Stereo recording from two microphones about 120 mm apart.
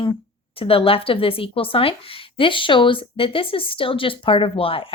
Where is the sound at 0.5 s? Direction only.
50° left (ahead or behind).